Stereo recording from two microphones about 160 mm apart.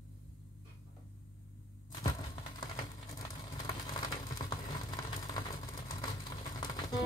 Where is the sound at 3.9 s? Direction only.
25° left (ahead or behind).